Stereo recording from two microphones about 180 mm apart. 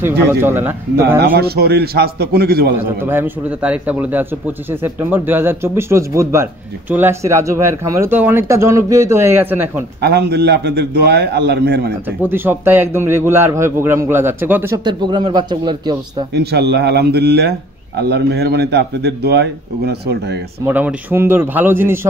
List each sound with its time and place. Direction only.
0.0 s speech: 10° right (ahead or behind)
1.2 s a man's voice: 60° right (ahead or behind)
3.0 s speech: 10° right (ahead or behind)
10.0 s a man's voice: 65° right (ahead or behind)
12.2 s speech: 10° right (ahead or behind)
14.9 s a man's voice: 25° right (ahead or behind)
16.3 s a man's voice: 65° right (ahead or behind)
20.6 s speech: 10° right (ahead or behind)